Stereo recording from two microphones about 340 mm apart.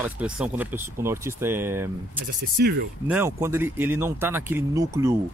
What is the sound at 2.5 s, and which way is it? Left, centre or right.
Speech, right.